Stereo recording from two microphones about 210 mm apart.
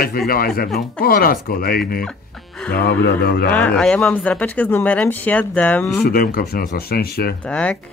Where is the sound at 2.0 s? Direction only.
5° left (ahead or behind).